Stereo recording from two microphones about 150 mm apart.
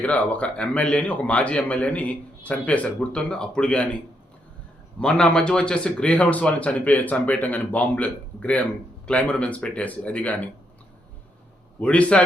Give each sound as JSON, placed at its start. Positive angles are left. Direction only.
{"t": 0.0, "sound": "a man's voice", "side_deg": 10}
{"t": 11.8, "sound": "a man's voice", "side_deg": 10}